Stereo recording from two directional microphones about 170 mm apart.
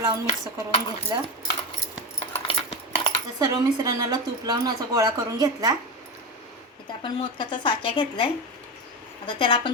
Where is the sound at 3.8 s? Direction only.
20° right (ahead or behind).